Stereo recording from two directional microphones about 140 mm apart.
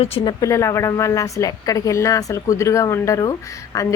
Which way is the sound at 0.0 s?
45° left (ahead or behind).